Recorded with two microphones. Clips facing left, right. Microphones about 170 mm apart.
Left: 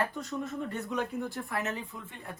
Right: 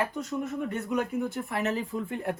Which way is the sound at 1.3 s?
25° right (ahead or behind).